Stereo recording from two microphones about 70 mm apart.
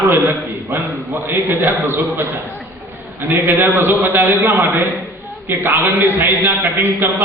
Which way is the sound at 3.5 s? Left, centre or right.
Right.